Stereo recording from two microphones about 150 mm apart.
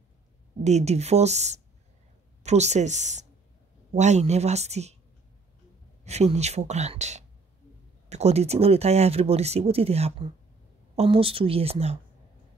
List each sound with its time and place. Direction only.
0.7 s speech: 50° right (ahead or behind)
6.0 s speech: 45° right (ahead or behind)